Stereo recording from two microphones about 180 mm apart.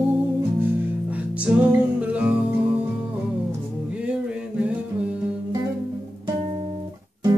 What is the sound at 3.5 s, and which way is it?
Music, 5° right (ahead or behind).